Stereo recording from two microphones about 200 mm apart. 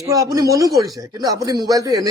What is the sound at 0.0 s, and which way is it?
A man's voice, 15° right (ahead or behind).